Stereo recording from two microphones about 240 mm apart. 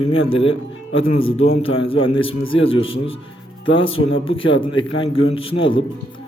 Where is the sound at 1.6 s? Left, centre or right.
Left.